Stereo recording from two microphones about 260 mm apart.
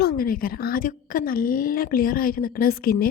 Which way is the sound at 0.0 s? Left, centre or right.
Left.